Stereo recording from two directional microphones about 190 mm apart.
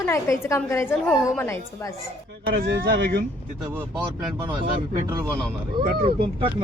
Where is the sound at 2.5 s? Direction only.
55° right (ahead or behind).